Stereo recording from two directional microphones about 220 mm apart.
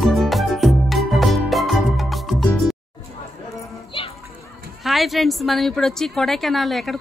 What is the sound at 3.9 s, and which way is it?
Children playing, 25° left (ahead or behind).